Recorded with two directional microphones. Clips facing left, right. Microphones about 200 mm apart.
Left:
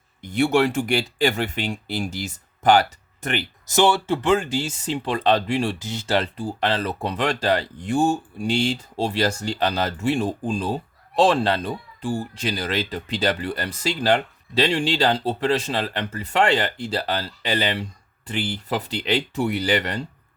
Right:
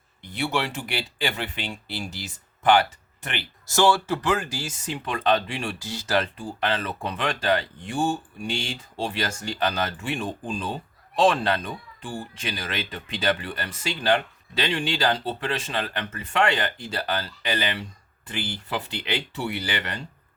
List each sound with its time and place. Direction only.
0.2 s speech: 45° left (ahead or behind)
3.7 s speech: 20° left (ahead or behind); by 5.7 s 35° left (ahead or behind)
5.8 s speech: 20° left (ahead or behind); by 20.1 s 40° left (ahead or behind)